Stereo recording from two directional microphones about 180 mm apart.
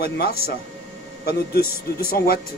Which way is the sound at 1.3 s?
60° left (ahead or behind).